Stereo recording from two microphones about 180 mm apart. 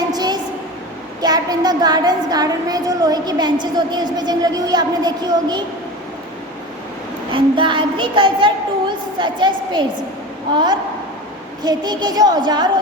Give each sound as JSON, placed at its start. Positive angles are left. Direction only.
{"t": 0.1, "sound": "a sound", "side_deg": -20}
{"t": 1.2, "sound": "a woman's voice", "side_deg": -20}
{"t": 7.3, "sound": "a woman's voice", "side_deg": -30}